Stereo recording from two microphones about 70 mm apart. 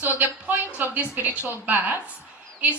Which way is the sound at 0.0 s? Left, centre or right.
Right.